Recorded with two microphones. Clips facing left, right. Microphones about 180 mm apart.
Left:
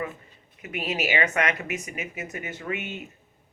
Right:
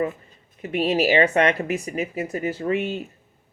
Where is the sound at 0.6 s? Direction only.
35° right (ahead or behind).